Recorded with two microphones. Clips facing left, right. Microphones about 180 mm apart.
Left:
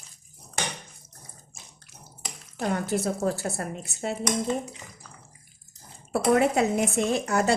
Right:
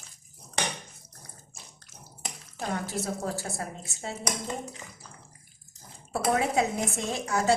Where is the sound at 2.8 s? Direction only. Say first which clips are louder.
Left 6 dB; 60° left (ahead or behind).